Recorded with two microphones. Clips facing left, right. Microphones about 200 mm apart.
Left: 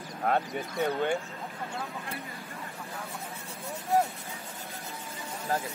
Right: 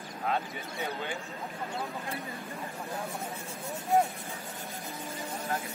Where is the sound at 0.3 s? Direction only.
55° left (ahead or behind).